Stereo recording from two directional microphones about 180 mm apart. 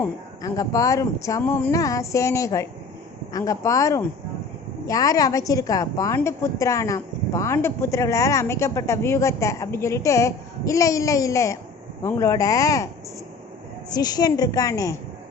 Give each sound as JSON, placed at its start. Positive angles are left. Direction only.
{"t": 0.0, "sound": "a woman's voice", "side_deg": 20}
{"t": 13.9, "sound": "a woman's voice", "side_deg": 20}